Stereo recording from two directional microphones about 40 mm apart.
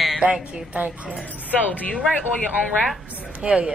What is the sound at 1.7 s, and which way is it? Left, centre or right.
Speech, left.